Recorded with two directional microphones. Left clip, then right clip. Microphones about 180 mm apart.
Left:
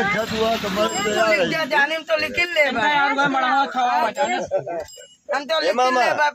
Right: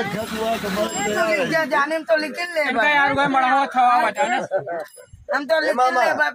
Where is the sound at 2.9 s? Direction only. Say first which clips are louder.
Right 1 dB; 30° right (ahead or behind).